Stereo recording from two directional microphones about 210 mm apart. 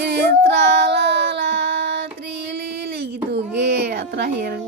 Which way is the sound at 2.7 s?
50° right (ahead or behind).